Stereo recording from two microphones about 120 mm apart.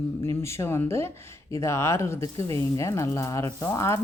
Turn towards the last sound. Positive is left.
turn(degrees=20)  # may be behind; listen again after turning